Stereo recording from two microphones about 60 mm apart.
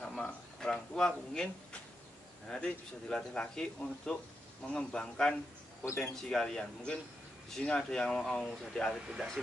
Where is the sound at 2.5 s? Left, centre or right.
Centre.